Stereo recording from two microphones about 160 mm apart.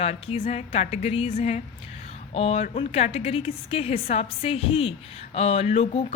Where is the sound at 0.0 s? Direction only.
40° left (ahead or behind).